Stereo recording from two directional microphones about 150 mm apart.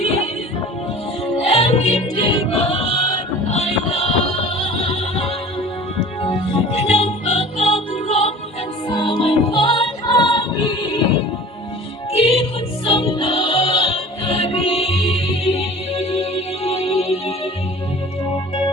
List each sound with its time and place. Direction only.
1.4 s music: 40° left (ahead or behind)
12.1 s music: 40° left (ahead or behind)